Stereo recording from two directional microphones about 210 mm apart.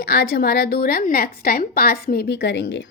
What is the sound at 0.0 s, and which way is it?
A woman's voice, 45° left (ahead or behind).